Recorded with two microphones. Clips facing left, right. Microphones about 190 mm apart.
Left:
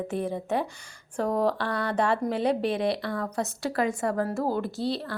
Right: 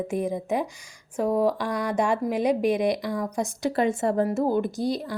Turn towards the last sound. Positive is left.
turn(degrees=-15)  # may be behind; listen again after turning